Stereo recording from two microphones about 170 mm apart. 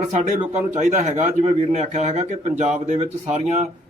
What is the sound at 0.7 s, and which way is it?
A man's voice, 45° right (ahead or behind).